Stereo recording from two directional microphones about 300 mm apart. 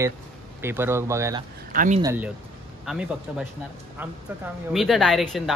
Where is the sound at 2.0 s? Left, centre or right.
Centre.